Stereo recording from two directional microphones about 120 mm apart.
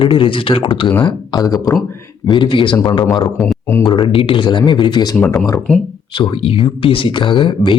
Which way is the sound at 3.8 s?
40° left (ahead or behind).